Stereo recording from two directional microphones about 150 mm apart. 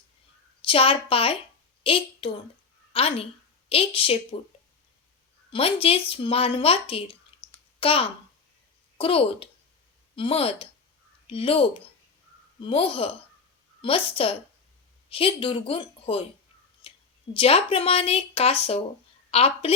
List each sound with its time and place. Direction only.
0.6 s a woman's voice: 35° left (ahead or behind)
5.5 s a woman's voice: 40° left (ahead or behind)
16.8 s a sound: 35° left (ahead or behind)
17.3 s a woman's voice: 40° left (ahead or behind)